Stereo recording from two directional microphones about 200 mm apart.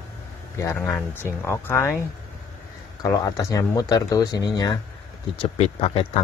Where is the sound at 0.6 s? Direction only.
10° left (ahead or behind).